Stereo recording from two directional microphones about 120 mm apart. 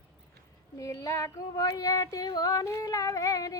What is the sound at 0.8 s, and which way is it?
Female singing, 30° left (ahead or behind).